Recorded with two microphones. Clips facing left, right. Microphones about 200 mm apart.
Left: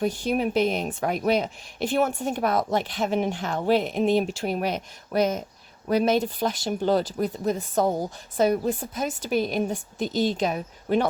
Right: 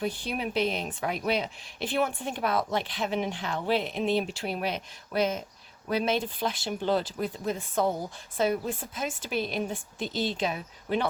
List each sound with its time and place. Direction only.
0.0 s a woman's voice: 45° left (ahead or behind)